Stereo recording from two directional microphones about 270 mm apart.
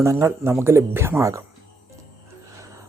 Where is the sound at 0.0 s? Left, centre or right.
Centre.